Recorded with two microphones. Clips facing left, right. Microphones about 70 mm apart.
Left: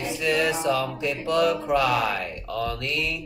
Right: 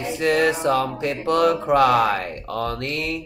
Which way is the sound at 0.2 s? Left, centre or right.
Right.